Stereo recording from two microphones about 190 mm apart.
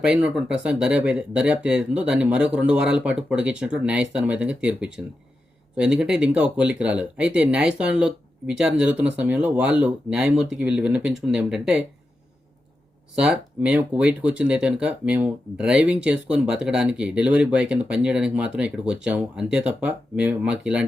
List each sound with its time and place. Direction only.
0.0 s speech: 5° right (ahead or behind)
13.1 s speech: 5° right (ahead or behind)